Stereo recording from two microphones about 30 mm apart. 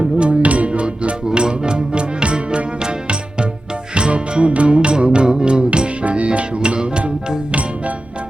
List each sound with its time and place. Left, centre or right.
0.0 s music: right